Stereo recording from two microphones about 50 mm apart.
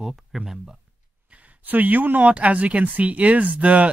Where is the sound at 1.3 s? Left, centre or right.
Right.